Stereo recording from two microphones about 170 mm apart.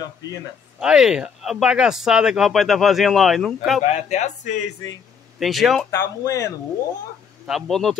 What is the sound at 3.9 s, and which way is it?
Speech, 45° left (ahead or behind).